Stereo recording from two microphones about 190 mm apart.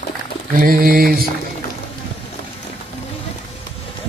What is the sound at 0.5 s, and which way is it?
Speech, 50° right (ahead or behind).